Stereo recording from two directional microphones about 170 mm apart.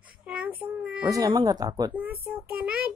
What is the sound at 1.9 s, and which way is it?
Speech, 10° right (ahead or behind).